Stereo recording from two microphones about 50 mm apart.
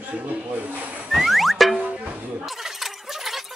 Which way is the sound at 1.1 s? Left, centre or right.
Centre.